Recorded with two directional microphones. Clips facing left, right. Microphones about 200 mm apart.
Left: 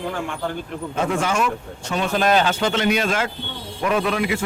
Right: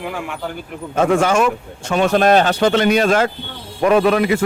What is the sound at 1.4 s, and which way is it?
A man's voice, 50° right (ahead or behind).